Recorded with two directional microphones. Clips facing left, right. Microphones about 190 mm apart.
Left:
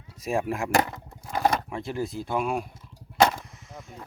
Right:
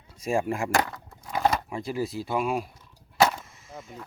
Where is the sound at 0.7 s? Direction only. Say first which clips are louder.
Left 2 dB; 20° left (ahead or behind).